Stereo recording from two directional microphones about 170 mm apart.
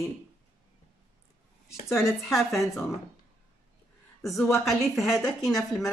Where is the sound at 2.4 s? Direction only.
Centre (ahead or behind).